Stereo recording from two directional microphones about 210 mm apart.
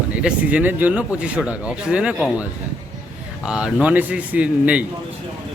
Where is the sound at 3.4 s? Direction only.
5° right (ahead or behind).